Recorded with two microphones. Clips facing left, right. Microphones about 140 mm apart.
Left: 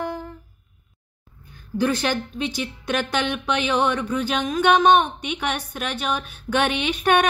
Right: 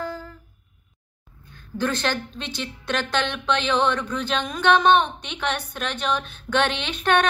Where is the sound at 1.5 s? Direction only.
10° left (ahead or behind).